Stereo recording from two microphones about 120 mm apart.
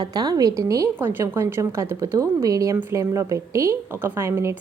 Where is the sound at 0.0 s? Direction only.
35° right (ahead or behind).